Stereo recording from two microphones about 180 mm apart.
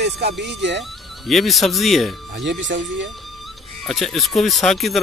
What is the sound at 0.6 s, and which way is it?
Speech, 90° right.